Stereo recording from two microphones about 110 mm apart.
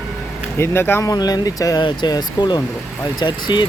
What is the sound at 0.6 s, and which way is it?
Speech, 20° left (ahead or behind).